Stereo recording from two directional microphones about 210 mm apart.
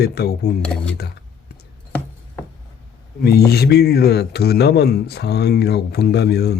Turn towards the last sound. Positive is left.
turn(degrees=50)  # may be behind; listen again after turning